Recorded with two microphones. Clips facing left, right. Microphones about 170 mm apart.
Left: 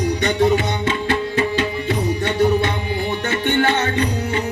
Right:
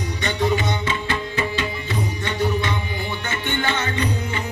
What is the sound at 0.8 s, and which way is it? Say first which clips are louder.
Music: left 5 dB; 60° left (ahead or behind).